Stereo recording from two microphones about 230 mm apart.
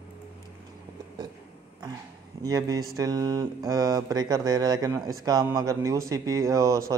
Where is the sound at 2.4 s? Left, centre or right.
Centre.